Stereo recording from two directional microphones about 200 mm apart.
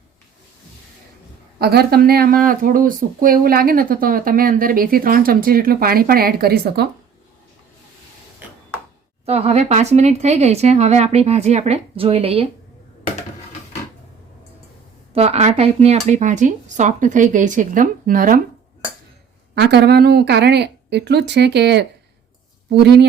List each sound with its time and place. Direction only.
1.5 s speech: 50° right (ahead or behind)
9.2 s speech: 30° right (ahead or behind)
15.1 s speech: 30° right (ahead or behind)
19.5 s speech: 55° right (ahead or behind)